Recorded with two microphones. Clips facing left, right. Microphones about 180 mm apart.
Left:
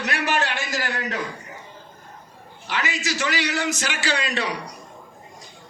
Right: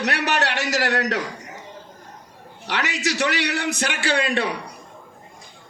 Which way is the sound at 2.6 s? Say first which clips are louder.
Right 2 dB; 70° right (ahead or behind).